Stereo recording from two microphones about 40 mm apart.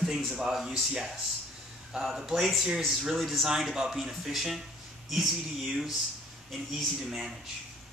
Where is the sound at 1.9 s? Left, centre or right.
Centre.